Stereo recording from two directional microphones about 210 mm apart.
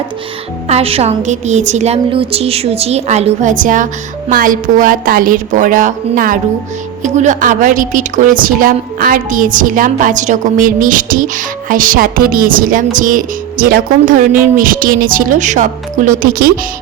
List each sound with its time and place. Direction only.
0.7 s a woman's voice: 30° right (ahead or behind); by 16.5 s 45° right (ahead or behind)